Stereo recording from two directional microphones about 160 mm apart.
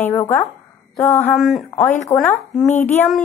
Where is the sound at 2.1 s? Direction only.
25° left (ahead or behind).